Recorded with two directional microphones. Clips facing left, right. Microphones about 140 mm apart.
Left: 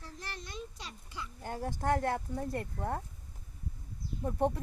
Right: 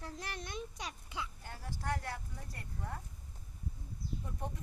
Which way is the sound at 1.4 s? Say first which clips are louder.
Left 9 dB; 50° left (ahead or behind).